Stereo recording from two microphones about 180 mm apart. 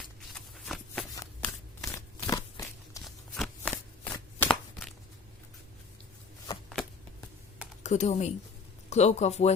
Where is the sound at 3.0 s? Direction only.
Centre (ahead or behind).